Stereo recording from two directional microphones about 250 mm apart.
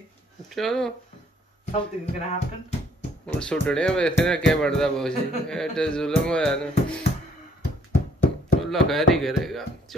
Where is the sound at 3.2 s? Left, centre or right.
Centre.